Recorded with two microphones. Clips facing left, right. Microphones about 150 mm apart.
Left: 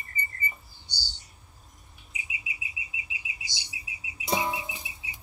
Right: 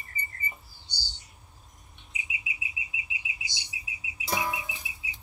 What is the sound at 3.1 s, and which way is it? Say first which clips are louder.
Chirp: right 1 dB; 35° left (ahead or behind).